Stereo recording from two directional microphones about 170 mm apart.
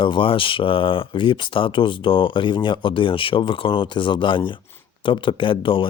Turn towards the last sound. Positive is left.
turn(degrees=30)  # may be behind; listen again after turning